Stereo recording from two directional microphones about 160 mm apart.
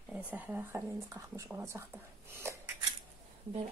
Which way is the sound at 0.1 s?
10° right (ahead or behind).